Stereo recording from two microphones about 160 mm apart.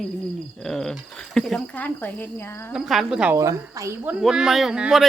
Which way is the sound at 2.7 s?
Centre (ahead or behind).